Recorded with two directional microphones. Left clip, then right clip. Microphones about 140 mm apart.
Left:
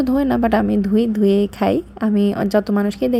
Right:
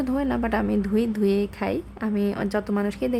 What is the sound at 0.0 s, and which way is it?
A woman's voice, 25° left (ahead or behind).